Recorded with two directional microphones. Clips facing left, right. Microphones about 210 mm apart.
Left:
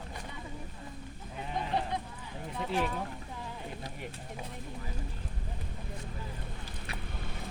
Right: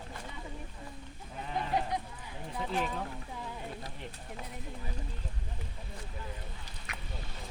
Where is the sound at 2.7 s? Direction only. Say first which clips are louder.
Left 2 dB; 5° left (ahead or behind).